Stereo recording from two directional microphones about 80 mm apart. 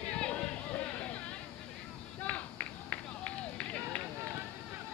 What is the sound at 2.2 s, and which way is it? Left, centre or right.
Run, centre.